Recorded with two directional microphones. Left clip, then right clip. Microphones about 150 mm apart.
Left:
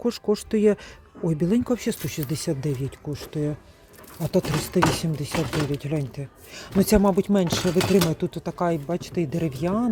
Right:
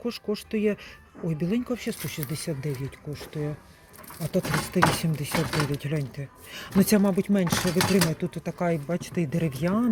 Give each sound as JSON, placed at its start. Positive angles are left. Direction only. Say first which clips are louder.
{"t": 0.0, "sound": "speech", "louder": "left 6 dB", "side_deg": 40}
{"t": 4.7, "sound": "speech", "louder": "left 1 dB", "side_deg": 20}
{"t": 8.4, "sound": "speech", "louder": "left 2 dB", "side_deg": 10}